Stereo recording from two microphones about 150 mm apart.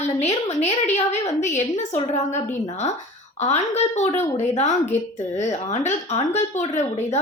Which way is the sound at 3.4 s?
50° left (ahead or behind).